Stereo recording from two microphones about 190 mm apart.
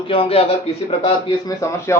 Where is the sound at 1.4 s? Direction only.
15° left (ahead or behind).